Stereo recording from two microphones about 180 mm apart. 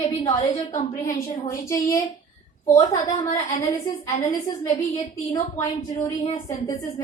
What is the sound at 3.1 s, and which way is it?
A woman's voice, 25° left (ahead or behind).